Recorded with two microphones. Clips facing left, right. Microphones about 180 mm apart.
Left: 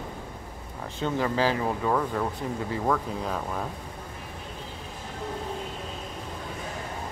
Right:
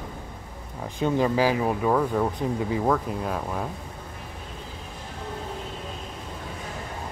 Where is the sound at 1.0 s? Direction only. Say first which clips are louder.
Right 4 dB; 15° right (ahead or behind).